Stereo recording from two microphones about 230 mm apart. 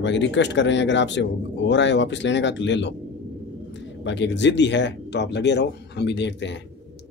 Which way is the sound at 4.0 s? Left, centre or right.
Left.